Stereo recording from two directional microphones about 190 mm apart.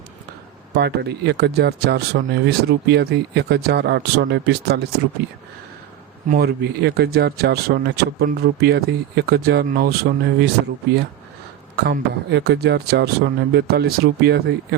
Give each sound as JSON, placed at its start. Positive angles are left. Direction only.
{"t": 0.7, "sound": "speech", "side_deg": -60}
{"t": 6.2, "sound": "speech", "side_deg": -50}
{"t": 11.9, "sound": "speech", "side_deg": -60}